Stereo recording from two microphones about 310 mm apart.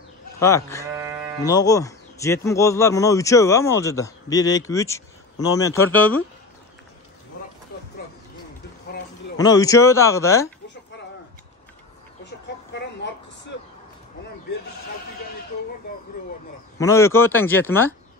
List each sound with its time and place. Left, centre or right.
0.4 s speech: centre
0.9 s moo: centre
1.4 s speech: centre
9.4 s speech: centre
12.3 s a sound: left
16.7 s speech: centre